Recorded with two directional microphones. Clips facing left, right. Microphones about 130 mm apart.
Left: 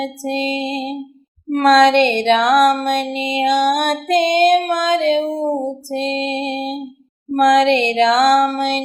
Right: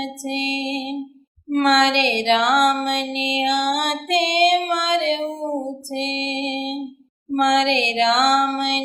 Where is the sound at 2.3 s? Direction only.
45° left (ahead or behind).